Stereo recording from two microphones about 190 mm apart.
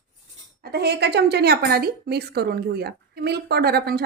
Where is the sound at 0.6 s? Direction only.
55° right (ahead or behind).